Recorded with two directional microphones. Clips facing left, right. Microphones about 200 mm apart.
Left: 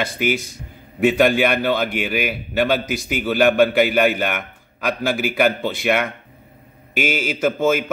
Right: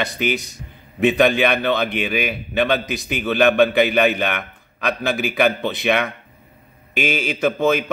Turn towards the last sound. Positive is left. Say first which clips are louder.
# even
turn(degrees=5)  # may be behind; listen again after turning